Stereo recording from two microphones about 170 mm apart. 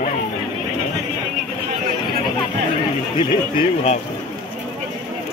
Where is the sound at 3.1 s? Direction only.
30° left (ahead or behind).